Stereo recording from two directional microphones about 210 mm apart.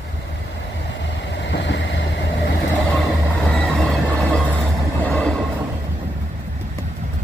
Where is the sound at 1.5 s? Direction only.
60° left (ahead or behind).